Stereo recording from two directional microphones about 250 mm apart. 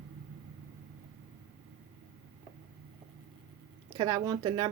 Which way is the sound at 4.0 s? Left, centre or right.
Centre.